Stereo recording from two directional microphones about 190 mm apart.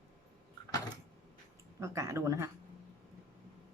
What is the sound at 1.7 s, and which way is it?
Speech, 15° right (ahead or behind).